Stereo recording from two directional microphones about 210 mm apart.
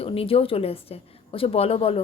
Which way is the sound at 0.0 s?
25° left (ahead or behind).